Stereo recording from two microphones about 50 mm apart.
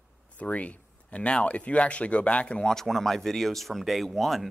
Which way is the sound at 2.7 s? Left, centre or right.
Centre.